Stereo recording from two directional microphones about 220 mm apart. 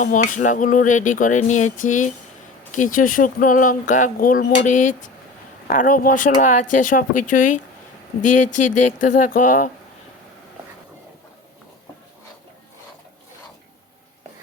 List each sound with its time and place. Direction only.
0.0 s speech: 35° left (ahead or behind)